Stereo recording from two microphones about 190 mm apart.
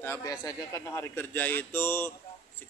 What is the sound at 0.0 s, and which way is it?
A man's voice, 15° left (ahead or behind).